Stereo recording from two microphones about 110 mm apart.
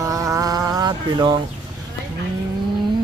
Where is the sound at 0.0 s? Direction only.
30° right (ahead or behind).